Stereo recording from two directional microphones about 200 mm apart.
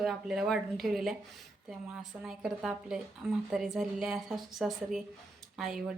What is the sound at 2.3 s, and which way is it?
A woman's voice, 5° right (ahead or behind).